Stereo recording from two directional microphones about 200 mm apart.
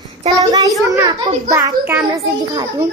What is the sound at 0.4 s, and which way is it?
A child's voice, 20° right (ahead or behind).